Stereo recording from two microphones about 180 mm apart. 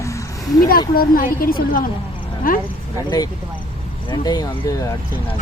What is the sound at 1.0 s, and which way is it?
Speech, 50° left (ahead or behind).